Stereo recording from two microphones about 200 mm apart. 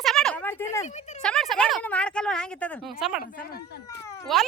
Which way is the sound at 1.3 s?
Centre (ahead or behind).